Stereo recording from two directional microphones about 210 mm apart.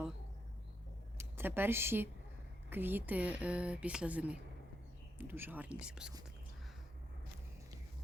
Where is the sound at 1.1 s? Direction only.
10° right (ahead or behind).